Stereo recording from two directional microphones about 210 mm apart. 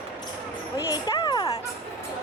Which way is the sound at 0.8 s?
20° left (ahead or behind).